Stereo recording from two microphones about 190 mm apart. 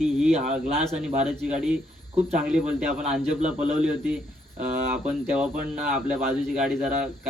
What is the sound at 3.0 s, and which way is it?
Speech, 35° right (ahead or behind).